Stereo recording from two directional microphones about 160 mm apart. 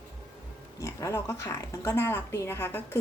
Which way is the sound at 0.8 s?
20° left (ahead or behind).